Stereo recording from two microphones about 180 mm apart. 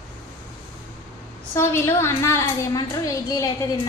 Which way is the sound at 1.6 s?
15° left (ahead or behind).